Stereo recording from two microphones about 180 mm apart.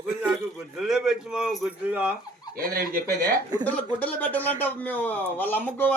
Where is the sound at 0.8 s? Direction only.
5° right (ahead or behind).